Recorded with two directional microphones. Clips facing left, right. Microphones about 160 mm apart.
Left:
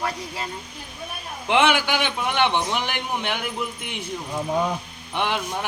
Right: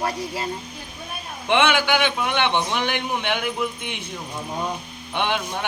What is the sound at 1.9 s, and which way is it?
A man's voice, 5° left (ahead or behind).